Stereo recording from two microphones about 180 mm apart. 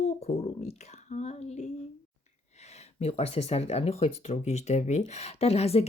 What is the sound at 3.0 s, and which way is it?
Speech, 35° left (ahead or behind).